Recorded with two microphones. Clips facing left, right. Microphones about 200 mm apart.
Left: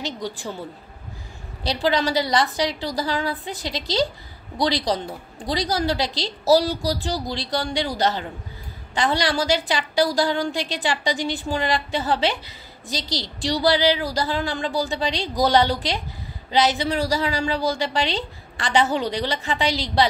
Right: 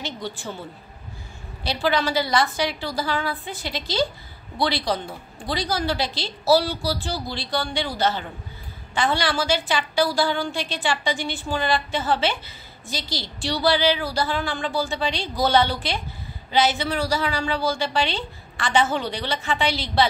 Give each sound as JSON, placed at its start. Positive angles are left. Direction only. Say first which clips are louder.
{"t": 0.0, "sound": "a woman's voice", "louder": "left 2 dB", "side_deg": 35}
{"t": 1.8, "sound": "a woman's voice", "louder": "left 1 dB", "side_deg": 35}